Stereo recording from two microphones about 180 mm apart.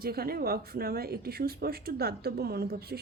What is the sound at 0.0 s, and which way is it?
Speech, 60° right (ahead or behind).